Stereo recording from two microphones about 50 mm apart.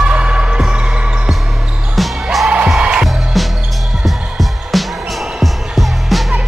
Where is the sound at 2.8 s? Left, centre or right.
Right.